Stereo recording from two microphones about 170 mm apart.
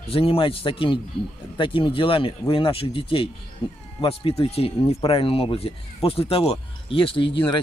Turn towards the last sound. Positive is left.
turn(degrees=30)  # may be behind; listen again after turning